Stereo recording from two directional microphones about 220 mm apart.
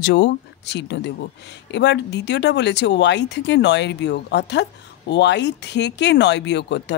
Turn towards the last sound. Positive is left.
turn(degrees=50)  # may be behind; listen again after turning